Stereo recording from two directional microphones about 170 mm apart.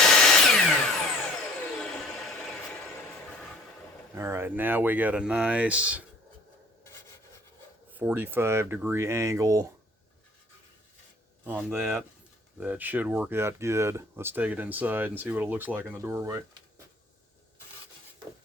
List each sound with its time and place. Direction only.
0.0 s a sound: 5° left (ahead or behind)
4.1 s speech: 15° right (ahead or behind)
7.9 s speech: 10° right (ahead or behind)
11.4 s speech: 10° right (ahead or behind)